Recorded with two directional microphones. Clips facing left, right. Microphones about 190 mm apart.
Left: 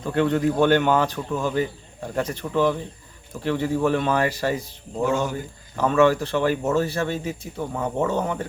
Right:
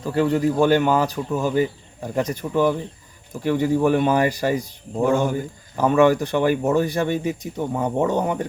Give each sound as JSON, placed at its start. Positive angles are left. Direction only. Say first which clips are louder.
{"t": 0.0, "sound": "speech", "louder": "right 1 dB", "side_deg": -5}
{"t": 5.0, "sound": "speech", "louder": "right 4 dB", "side_deg": -55}
{"t": 5.7, "sound": "speech", "louder": "right 2 dB", "side_deg": -15}